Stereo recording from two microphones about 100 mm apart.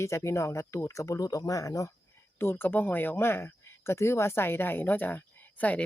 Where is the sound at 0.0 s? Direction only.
30° left (ahead or behind).